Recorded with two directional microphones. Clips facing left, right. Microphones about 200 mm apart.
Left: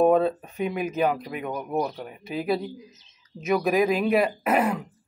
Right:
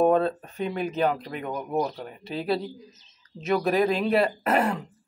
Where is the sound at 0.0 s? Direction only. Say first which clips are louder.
Left 2 dB; 5° left (ahead or behind).